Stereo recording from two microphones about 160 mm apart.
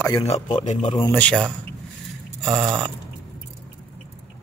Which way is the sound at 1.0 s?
10° left (ahead or behind).